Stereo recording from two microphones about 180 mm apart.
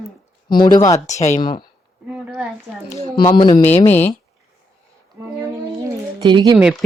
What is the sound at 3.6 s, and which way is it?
Speech, 35° left (ahead or behind).